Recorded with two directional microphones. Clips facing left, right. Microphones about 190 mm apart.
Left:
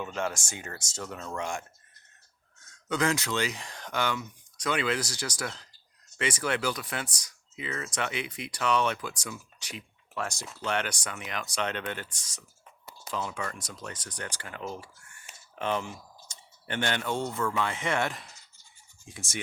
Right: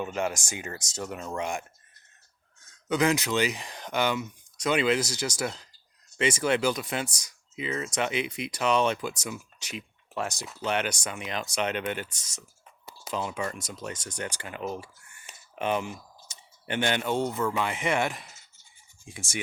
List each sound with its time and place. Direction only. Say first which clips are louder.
0.0 s speech: right 3 dB; 10° right (ahead or behind)
2.9 s speech: right 4 dB; 15° right (ahead or behind)